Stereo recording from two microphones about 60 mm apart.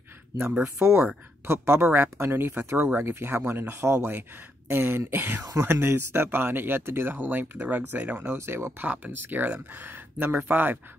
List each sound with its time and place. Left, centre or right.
0.5 s speech: right
8.3 s speech: right
8.8 s speech: right